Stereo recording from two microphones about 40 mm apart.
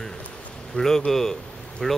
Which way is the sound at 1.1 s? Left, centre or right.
Centre.